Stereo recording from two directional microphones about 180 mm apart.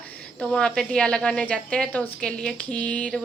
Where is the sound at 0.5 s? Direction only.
5° left (ahead or behind).